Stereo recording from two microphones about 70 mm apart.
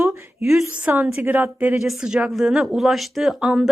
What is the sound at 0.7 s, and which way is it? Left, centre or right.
A woman's voice, right.